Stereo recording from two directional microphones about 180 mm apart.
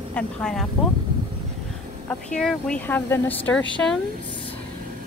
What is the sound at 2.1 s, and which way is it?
A woman's voice, 5° left (ahead or behind).